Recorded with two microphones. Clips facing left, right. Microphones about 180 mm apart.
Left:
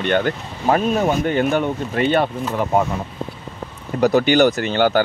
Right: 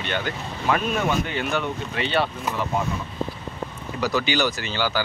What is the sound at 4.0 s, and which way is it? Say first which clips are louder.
Speech: left 9 dB; 50° left (ahead or behind).